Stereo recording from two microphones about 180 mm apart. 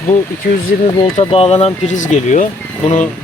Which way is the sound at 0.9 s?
30° left (ahead or behind).